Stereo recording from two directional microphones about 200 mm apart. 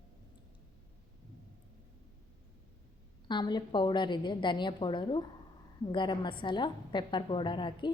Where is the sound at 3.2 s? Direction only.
20° left (ahead or behind).